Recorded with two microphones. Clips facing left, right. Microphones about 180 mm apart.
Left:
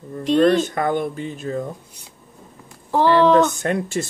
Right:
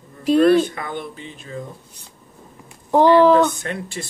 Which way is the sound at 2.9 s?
15° right (ahead or behind).